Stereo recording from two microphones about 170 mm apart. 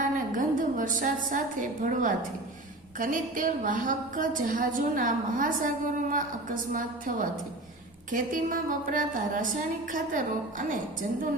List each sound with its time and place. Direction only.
0.3 s a woman's voice: 50° right (ahead or behind)